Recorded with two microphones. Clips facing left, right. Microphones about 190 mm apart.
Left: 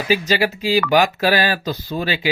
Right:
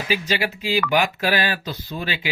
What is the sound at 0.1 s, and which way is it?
Speech, 40° left (ahead or behind).